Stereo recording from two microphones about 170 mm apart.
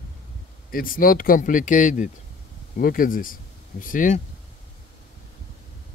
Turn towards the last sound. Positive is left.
turn(degrees=50)  # may be behind; listen again after turning